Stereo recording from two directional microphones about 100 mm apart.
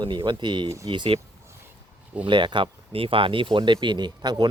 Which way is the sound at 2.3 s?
50° right (ahead or behind).